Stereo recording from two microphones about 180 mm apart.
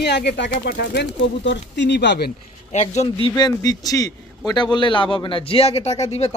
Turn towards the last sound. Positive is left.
turn(degrees=35)  # may be behind; listen again after turning